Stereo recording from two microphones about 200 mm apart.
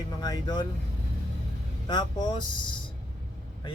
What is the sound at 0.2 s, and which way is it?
Speech, 20° left (ahead or behind).